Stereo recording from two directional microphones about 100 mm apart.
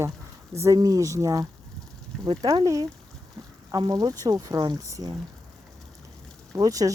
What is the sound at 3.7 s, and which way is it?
Speech, 40° right (ahead or behind).